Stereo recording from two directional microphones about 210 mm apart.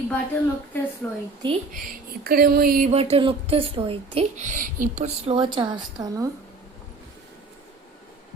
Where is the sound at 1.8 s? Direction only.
45° right (ahead or behind); by 6.3 s 15° right (ahead or behind).